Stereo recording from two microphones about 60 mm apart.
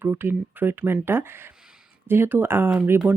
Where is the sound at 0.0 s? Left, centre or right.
Right.